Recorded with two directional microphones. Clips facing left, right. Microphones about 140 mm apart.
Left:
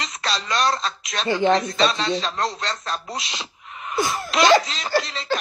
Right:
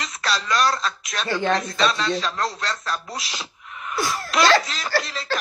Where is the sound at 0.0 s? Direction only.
30° left (ahead or behind).